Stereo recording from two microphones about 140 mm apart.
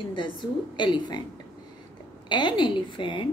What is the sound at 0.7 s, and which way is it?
Speech, 35° left (ahead or behind).